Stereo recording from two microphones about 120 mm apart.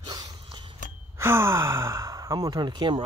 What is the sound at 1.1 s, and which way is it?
Speech, 20° right (ahead or behind).